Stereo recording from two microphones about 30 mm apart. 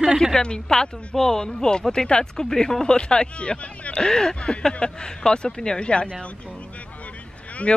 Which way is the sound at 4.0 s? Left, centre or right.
Centre.